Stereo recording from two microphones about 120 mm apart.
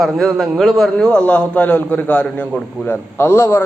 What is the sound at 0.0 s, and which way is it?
A man's voice, centre (ahead or behind).